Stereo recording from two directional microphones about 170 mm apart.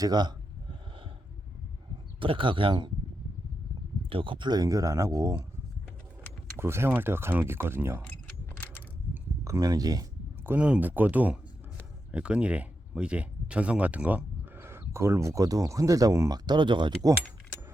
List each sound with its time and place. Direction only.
0.0 s a sound: 25° right (ahead or behind)
2.2 s speech: 30° right (ahead or behind)
4.1 s speech: 30° right (ahead or behind)
6.6 s speech: 15° right (ahead or behind)
9.1 s speech: 20° right (ahead or behind)